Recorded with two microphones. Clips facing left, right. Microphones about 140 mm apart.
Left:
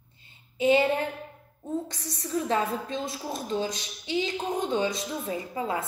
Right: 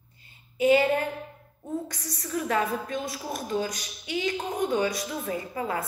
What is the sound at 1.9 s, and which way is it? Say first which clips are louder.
A woman's voice: left 1 dB; 25° left (ahead or behind).